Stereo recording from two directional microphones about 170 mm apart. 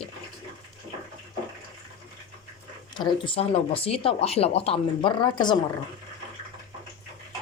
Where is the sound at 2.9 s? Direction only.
30° left (ahead or behind).